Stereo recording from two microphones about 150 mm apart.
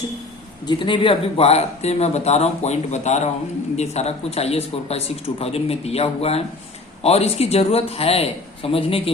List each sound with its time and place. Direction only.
0.7 s speech: 35° left (ahead or behind)